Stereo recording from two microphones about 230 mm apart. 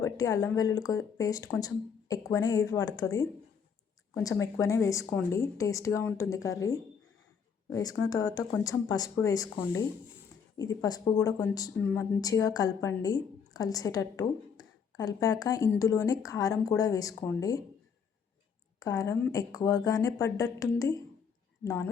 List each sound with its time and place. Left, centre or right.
0.0 s speech: centre
18.8 s speech: centre